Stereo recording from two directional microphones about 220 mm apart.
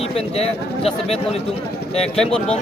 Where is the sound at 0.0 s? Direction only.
30° left (ahead or behind).